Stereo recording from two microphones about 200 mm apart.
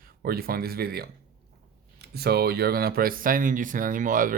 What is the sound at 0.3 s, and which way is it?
Speech, 50° right (ahead or behind).